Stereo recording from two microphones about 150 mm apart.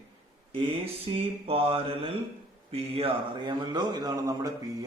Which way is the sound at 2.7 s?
40° right (ahead or behind).